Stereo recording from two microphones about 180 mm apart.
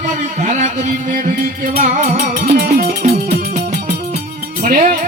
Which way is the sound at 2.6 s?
45° right (ahead or behind).